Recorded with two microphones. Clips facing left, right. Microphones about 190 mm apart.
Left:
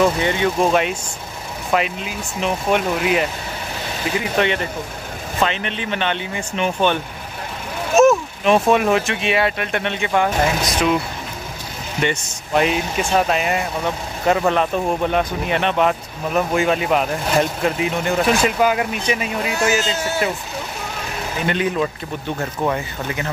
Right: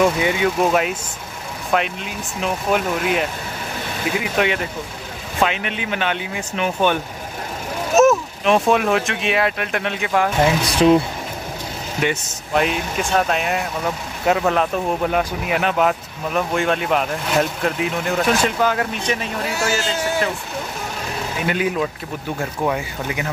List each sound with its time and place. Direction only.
0.0 s speech: 10° right (ahead or behind)
10.6 s speech: 30° right (ahead or behind)
12.0 s speech: centre (ahead or behind)
18.1 s speech: 10° left (ahead or behind)
21.5 s speech: 5° right (ahead or behind)